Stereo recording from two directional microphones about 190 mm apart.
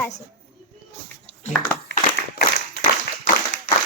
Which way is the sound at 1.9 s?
65° left (ahead or behind).